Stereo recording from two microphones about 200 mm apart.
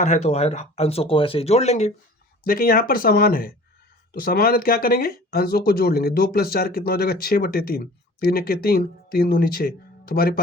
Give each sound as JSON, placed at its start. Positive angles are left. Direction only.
{"t": 0.0, "sound": "speech", "side_deg": 35}
{"t": 2.4, "sound": "speech", "side_deg": 45}